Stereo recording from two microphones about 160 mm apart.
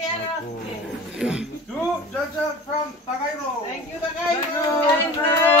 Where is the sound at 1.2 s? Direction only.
5° right (ahead or behind).